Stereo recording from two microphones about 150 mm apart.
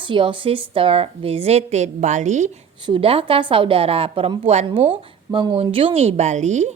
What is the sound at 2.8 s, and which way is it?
A woman's voice, 35° right (ahead or behind).